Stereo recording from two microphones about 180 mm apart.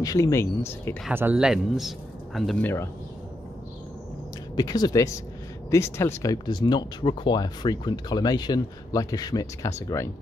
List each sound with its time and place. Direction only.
0.0 s speech: 20° left (ahead or behind)
1.1 s speech: 5° right (ahead or behind)
4.6 s speech: 20° left (ahead or behind)